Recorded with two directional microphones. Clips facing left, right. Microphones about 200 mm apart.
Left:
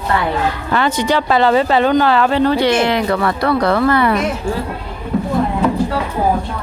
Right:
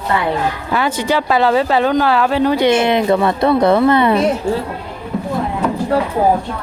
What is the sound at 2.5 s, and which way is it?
A woman's voice, 20° right (ahead or behind).